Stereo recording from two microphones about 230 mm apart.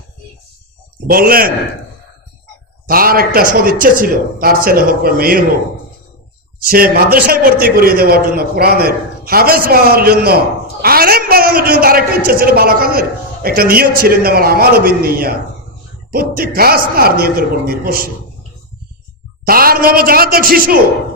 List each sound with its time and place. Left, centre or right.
1.0 s a woman's voice: right
2.8 s a woman's voice: right
6.6 s a woman's voice: right
16.6 s a woman's voice: right
19.5 s a woman's voice: right